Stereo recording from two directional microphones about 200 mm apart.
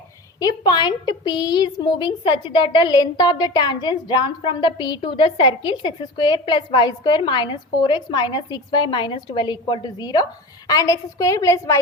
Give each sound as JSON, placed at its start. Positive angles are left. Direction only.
{"t": 0.3, "sound": "a woman's voice", "side_deg": 20}